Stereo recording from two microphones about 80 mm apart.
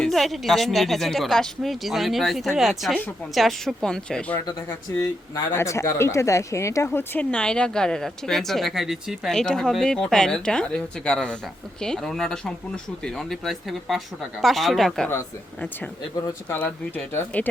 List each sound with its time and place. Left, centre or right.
0.0 s speech: centre
5.5 s a woman's voice: left
7.3 s speech: centre
9.3 s speech: centre
16.6 s speech: left